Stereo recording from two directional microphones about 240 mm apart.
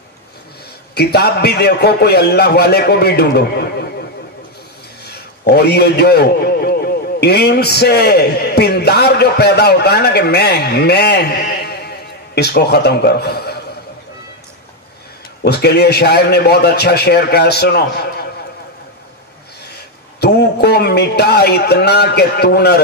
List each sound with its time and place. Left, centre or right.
0.9 s a man's voice: left
5.0 s a man's voice: left
15.4 s a man's voice: left
19.6 s a man's voice: left